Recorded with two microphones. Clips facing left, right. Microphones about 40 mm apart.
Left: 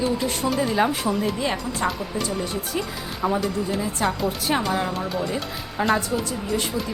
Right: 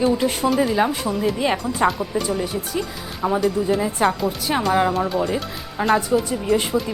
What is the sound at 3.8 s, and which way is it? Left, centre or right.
Speech, centre.